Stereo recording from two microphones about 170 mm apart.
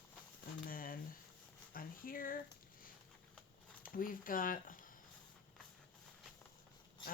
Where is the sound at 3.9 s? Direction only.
55° left (ahead or behind).